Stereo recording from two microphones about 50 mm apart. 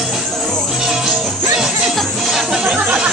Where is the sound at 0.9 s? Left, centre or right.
Centre.